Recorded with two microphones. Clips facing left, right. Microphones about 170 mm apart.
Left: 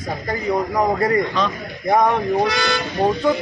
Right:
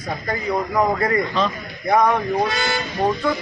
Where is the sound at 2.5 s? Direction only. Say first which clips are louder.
Left 2 dB; 75° left (ahead or behind).